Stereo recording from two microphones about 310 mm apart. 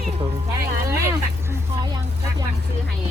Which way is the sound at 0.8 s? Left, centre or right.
Centre.